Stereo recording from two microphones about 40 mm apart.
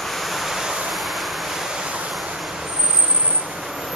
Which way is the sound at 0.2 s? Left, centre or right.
Centre.